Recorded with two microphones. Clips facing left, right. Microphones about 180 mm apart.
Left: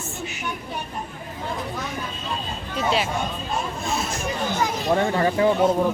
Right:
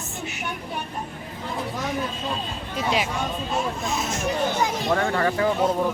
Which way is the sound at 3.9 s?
20° right (ahead or behind).